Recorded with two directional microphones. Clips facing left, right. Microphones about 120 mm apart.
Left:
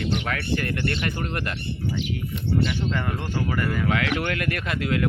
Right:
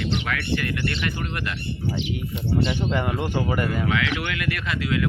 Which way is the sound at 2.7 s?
15° right (ahead or behind).